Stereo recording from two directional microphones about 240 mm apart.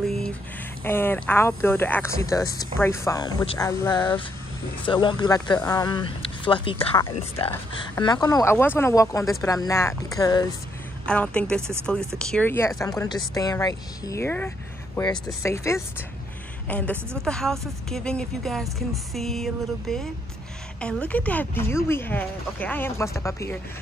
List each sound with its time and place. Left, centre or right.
0.0 s a sound: centre
0.8 s speech: centre
11.1 s a woman's voice: centre